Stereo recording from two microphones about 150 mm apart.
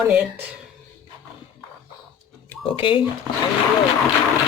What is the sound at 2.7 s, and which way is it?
Speech, 35° left (ahead or behind).